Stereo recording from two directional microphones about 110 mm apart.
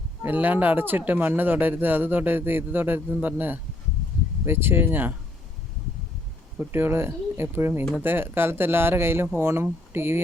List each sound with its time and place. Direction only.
0.2 s speech: 15° right (ahead or behind)
6.6 s speech: 20° right (ahead or behind)